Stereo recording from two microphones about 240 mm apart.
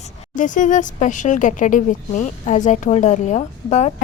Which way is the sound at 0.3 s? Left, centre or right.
Left.